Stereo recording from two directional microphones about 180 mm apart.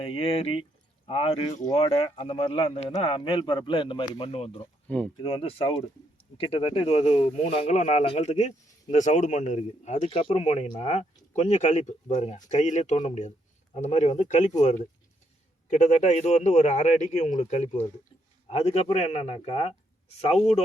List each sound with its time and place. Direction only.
0.0 s speech: 30° left (ahead or behind)
4.9 s speech: 5° left (ahead or behind)
5.2 s speech: 30° left (ahead or behind)